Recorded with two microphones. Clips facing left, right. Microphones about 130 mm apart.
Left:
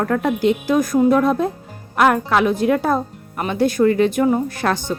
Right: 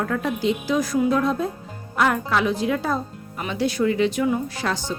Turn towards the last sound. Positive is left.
turn(degrees=55)  # may be behind; listen again after turning